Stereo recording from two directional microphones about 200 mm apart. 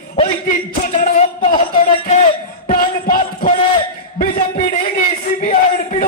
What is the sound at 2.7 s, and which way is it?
Speech, 40° left (ahead or behind).